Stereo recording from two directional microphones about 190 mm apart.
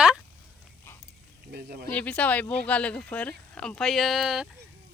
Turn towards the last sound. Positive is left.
turn(degrees=-5)  # may be behind; listen again after turning